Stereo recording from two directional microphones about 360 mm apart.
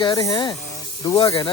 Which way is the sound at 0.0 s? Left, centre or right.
Centre.